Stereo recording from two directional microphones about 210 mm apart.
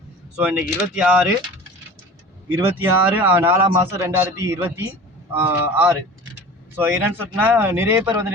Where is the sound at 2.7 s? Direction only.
10° right (ahead or behind).